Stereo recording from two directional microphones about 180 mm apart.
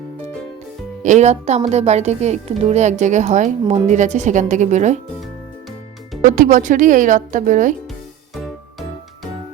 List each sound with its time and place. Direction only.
1.0 s speech: 40° right (ahead or behind)
6.3 s speech: 45° right (ahead or behind)